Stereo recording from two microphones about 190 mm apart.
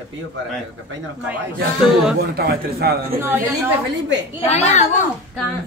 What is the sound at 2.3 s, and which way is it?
Speech, 55° right (ahead or behind).